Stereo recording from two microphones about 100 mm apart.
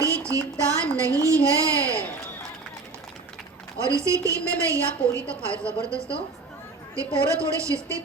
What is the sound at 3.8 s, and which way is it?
A woman's voice, 30° right (ahead or behind).